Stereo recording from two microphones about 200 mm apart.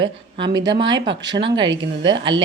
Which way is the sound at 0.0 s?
25° right (ahead or behind).